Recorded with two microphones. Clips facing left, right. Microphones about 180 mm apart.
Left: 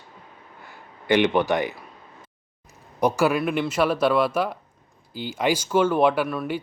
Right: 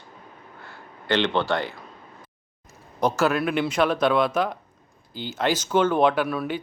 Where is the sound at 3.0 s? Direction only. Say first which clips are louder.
Left 1 dB; 15° left (ahead or behind).